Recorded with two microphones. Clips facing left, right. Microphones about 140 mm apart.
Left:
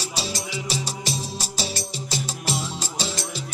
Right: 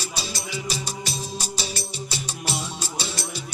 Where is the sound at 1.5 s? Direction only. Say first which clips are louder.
Left 2 dB; 40° left (ahead or behind).